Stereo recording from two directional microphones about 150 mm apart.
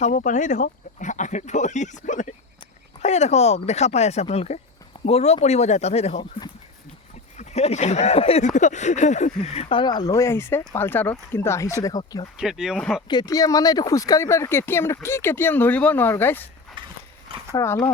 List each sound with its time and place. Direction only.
0.0 s speech: 55° left (ahead or behind)
7.3 s speech: 50° left (ahead or behind); by 12.2 s 25° left (ahead or behind)
12.4 s speech: 5° right (ahead or behind)
13.1 s speech: 25° left (ahead or behind)
16.8 s horse: 35° right (ahead or behind)
17.5 s speech: 20° left (ahead or behind)